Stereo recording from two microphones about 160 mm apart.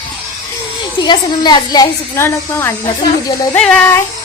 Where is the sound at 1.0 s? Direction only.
25° left (ahead or behind).